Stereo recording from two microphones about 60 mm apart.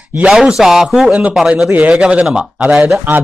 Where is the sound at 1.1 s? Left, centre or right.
Centre.